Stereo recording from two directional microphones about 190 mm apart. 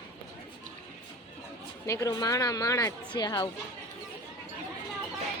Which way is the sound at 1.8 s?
15° left (ahead or behind).